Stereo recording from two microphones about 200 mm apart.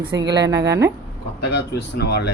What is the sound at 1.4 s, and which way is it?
Speech, 55° left (ahead or behind).